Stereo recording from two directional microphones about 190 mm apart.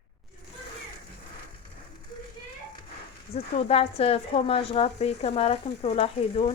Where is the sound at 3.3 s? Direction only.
30° left (ahead or behind).